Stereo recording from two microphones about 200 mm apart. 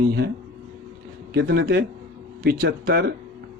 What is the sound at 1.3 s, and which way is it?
Speech, 60° right (ahead or behind).